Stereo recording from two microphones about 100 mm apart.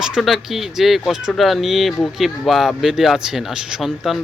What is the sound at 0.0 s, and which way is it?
A man's voice, 5° right (ahead or behind).